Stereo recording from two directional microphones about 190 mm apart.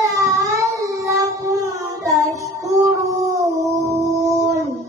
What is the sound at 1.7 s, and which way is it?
Child singing, 15° right (ahead or behind).